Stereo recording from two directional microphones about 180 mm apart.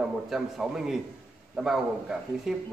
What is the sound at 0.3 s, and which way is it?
A man's voice, centre (ahead or behind).